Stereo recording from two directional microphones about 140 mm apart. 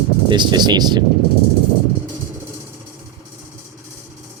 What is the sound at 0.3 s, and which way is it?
Speech, 30° right (ahead or behind).